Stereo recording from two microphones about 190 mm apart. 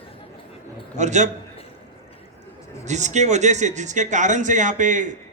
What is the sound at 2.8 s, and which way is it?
Speech, 40° right (ahead or behind).